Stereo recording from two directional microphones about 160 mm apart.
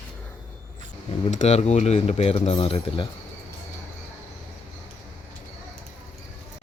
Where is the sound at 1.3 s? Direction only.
45° left (ahead or behind).